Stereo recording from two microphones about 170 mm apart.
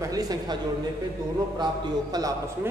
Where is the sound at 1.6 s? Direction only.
20° right (ahead or behind).